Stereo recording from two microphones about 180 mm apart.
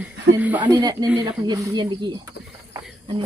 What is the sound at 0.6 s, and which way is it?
Speech, 20° right (ahead or behind).